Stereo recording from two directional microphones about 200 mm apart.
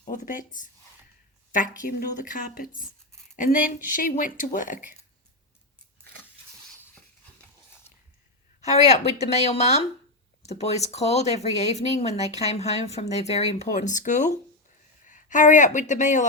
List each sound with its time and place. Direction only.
0.0 s speech: 40° left (ahead or behind)
3.1 s writing: 5° left (ahead or behind)
3.3 s speech: 45° left (ahead or behind)
8.6 s speech: 35° left (ahead or behind)